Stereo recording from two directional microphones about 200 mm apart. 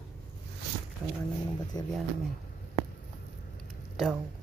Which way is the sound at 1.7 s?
20° left (ahead or behind).